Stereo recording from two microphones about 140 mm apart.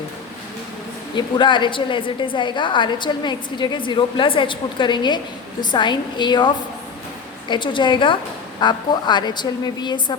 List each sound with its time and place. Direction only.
1.1 s a woman's voice: 35° left (ahead or behind)